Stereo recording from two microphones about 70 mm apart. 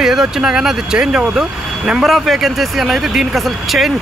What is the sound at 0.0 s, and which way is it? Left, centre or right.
Speech, centre.